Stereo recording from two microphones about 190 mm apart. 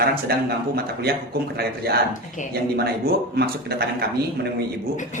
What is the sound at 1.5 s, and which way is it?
A man's voice, 55° right (ahead or behind).